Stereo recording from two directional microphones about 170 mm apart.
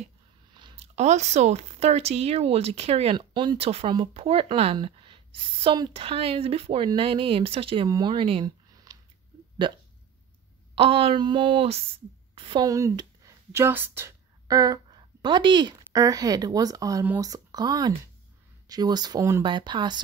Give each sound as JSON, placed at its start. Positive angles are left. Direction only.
{"t": 0.6, "sound": "a sound", "side_deg": -25}
{"t": 0.9, "sound": "a woman's voice", "side_deg": -40}
{"t": 12.6, "sound": "speech", "side_deg": -20}